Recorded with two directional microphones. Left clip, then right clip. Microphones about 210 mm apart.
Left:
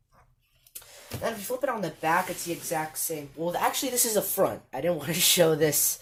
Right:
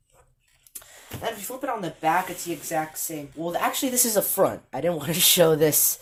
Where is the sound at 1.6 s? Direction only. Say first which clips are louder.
Right 3 dB; 30° right (ahead or behind).